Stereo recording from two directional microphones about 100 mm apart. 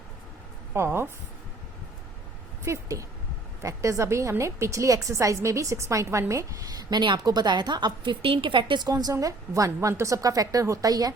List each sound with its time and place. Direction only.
0.7 s a woman's voice: 25° right (ahead or behind)
2.7 s a woman's voice: 30° right (ahead or behind)
7.0 s a woman's voice: 50° right (ahead or behind)